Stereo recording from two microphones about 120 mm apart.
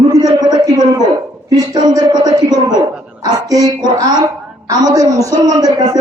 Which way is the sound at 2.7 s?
10° right (ahead or behind).